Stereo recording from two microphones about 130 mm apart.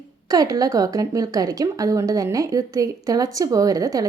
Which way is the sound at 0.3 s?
30° right (ahead or behind).